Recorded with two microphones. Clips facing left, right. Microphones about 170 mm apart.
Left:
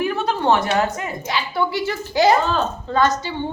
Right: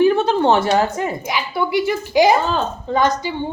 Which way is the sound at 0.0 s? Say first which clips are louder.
Right 6 dB; 30° right (ahead or behind).